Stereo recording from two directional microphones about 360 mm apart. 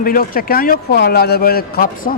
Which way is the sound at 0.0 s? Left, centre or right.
Left.